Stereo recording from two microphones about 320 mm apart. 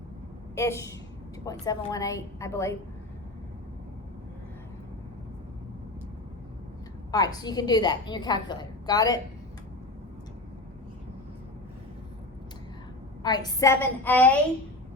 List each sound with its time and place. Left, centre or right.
0.5 s a woman's voice: centre
7.1 s a woman's voice: centre
13.2 s a woman's voice: centre